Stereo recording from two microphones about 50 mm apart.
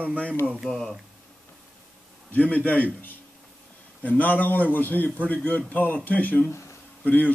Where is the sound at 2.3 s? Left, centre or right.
Left.